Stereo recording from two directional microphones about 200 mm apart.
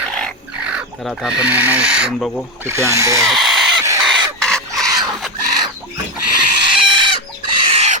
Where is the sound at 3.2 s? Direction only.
Centre (ahead or behind).